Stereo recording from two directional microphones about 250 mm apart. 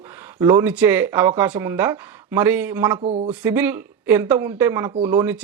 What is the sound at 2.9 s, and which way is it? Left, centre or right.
Speech, right.